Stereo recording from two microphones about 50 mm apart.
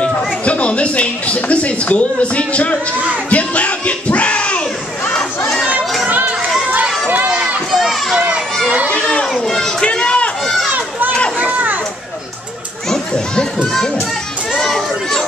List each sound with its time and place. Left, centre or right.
0.0 s speech: left
3.3 s a sound: left
5.1 s crowd: centre
7.7 s children playing: centre
9.4 s run: centre
10.4 s run: centre
10.7 s run: right
11.3 s children playing: right
14.6 s children playing: centre